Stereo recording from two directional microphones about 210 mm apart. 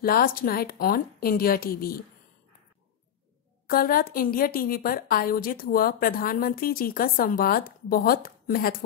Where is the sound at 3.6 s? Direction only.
45° left (ahead or behind).